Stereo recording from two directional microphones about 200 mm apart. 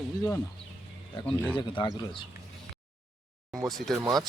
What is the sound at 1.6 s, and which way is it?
Speech, 25° left (ahead or behind).